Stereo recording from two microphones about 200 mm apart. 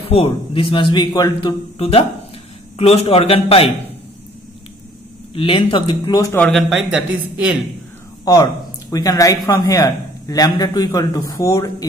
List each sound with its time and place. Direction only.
0.1 s a man's voice: 25° left (ahead or behind)
5.3 s a man's voice: 25° left (ahead or behind)
6.4 s speech: centre (ahead or behind)
8.3 s a man's voice: 20° left (ahead or behind)